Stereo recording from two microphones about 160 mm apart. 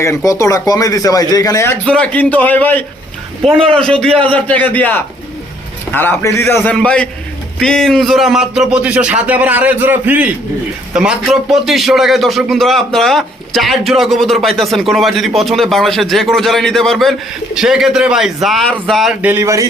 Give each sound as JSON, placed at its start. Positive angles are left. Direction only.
{"t": 0.3, "sound": "a man's voice", "side_deg": 20}
{"t": 19.2, "sound": "speech", "side_deg": -15}